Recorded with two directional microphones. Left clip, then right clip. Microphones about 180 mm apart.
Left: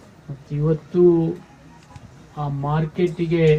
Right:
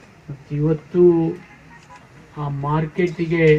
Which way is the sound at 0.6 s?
40° right (ahead or behind).